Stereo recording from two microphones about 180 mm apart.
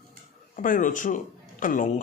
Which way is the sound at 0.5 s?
50° left (ahead or behind).